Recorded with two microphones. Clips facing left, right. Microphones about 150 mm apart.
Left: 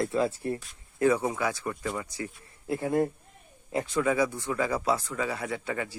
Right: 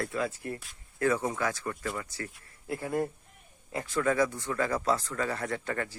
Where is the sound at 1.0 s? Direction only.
15° left (ahead or behind).